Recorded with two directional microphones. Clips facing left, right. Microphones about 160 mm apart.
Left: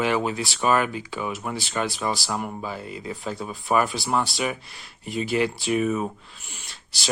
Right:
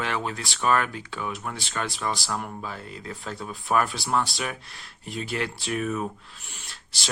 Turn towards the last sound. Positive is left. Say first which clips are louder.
# left 1 dB
turn(degrees=0)  # may be behind; listen again after turning